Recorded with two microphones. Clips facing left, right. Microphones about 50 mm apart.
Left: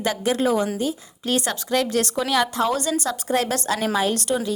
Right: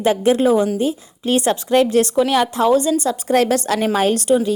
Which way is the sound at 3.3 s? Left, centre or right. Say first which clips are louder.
Right 7 dB; right.